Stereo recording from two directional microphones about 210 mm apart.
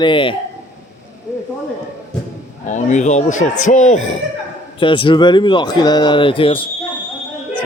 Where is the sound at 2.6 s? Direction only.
35° left (ahead or behind).